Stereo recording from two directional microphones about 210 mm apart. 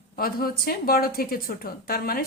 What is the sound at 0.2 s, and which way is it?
A woman's voice, 45° left (ahead or behind).